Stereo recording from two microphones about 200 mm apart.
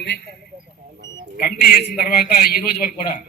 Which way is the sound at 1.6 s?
50° left (ahead or behind).